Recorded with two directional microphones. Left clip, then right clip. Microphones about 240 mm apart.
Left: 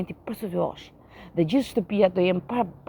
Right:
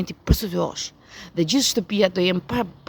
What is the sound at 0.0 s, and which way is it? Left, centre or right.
Speech, right.